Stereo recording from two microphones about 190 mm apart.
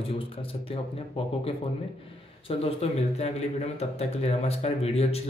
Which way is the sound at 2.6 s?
35° left (ahead or behind).